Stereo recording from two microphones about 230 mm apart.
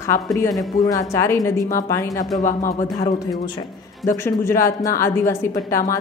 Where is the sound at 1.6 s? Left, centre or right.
Left.